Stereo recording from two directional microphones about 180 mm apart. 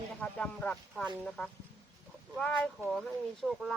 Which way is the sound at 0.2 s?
5° left (ahead or behind).